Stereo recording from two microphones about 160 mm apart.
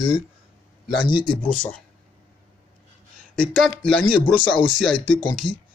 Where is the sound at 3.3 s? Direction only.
5° left (ahead or behind).